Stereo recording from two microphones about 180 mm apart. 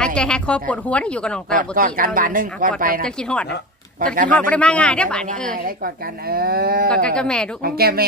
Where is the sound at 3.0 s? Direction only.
5° left (ahead or behind).